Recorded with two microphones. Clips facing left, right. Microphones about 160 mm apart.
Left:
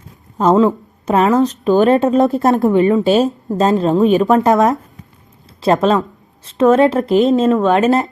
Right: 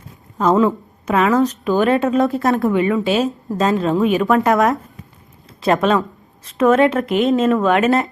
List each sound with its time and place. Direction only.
0.3 s a woman's voice: 25° left (ahead or behind)
5.8 s speech: 30° left (ahead or behind)
7.9 s speech: centre (ahead or behind)